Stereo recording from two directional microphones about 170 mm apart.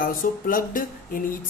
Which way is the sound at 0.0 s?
55° left (ahead or behind).